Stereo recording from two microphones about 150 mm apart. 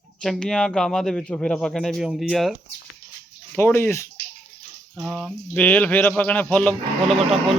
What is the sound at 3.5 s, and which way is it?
Speech, 15° left (ahead or behind).